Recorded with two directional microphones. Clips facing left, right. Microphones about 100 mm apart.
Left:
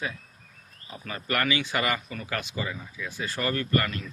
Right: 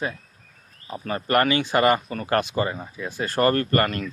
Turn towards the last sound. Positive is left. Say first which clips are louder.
# right 5 dB
turn(degrees=-50)  # may be behind; listen again after turning